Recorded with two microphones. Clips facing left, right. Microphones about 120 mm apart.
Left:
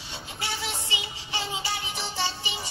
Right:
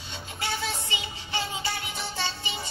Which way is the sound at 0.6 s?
15° left (ahead or behind).